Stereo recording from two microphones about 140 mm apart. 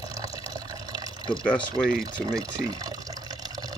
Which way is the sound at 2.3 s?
25° right (ahead or behind).